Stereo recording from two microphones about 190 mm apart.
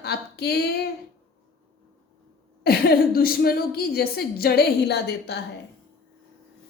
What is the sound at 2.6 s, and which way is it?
A woman's voice, 55° left (ahead or behind).